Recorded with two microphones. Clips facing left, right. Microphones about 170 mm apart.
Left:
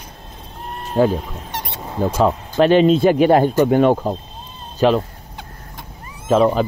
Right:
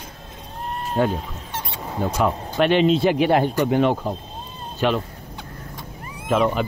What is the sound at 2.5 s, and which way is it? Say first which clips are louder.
Speech: left 5 dB; 40° left (ahead or behind).